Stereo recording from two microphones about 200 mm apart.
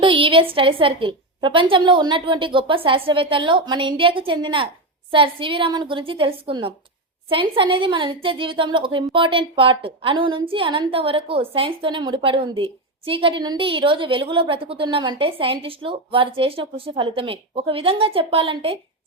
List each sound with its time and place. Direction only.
0.0 s a woman's voice: 25° right (ahead or behind)